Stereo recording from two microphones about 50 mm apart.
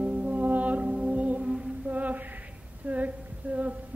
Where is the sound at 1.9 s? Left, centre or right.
Right.